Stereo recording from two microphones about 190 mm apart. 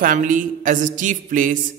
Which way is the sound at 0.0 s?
45° right (ahead or behind).